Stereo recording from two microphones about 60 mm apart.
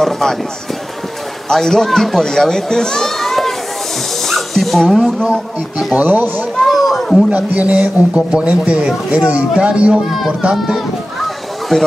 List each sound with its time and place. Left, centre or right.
0.0 s speech: centre
1.5 s speech: centre
4.2 s dog: centre
5.2 s a man's voice: centre
5.9 s speech: right
6.6 s speech: centre
7.2 s a man's voice: right
11.7 s speech: centre